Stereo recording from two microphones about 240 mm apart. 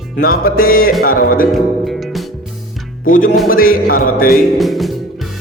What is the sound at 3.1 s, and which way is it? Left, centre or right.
A man's voice, left.